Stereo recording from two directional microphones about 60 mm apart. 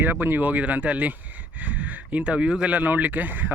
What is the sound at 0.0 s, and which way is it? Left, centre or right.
Speech, right.